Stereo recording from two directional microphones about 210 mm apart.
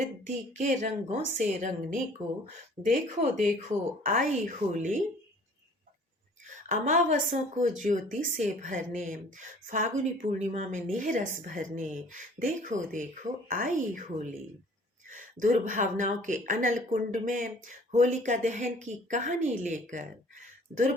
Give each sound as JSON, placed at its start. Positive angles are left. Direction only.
{"t": 0.3, "sound": "speech", "side_deg": -35}
{"t": 6.7, "sound": "speech", "side_deg": -40}